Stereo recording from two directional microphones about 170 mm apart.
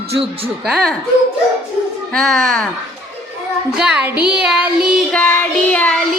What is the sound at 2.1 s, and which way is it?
Child singing, centre (ahead or behind).